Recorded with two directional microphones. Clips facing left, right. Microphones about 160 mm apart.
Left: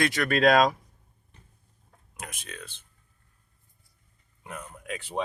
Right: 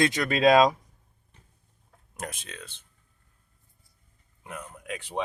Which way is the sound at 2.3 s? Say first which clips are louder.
Even; 25° right (ahead or behind).